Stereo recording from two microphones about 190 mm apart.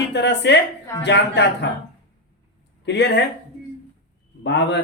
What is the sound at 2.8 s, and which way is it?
Speech, 65° left (ahead or behind).